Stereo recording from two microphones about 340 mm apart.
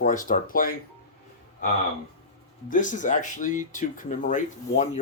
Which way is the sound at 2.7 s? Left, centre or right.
Left.